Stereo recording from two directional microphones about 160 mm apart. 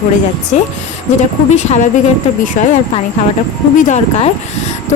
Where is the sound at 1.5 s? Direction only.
45° left (ahead or behind).